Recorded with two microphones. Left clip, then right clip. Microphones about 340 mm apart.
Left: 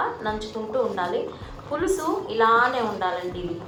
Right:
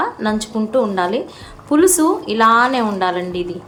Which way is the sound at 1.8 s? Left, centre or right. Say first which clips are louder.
Right 7 dB; right.